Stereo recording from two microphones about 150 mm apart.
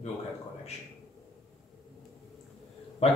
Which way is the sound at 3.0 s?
45° left (ahead or behind).